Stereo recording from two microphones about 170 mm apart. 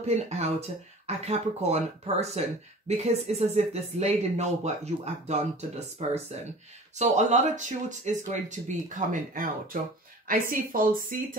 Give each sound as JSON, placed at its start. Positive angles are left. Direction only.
{"t": 0.0, "sound": "speech", "side_deg": -40}